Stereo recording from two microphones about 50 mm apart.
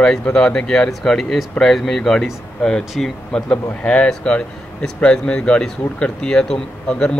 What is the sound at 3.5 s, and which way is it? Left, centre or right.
Speech, left.